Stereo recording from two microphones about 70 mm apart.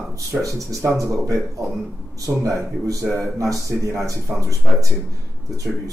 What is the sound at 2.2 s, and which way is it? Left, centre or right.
Speech, right.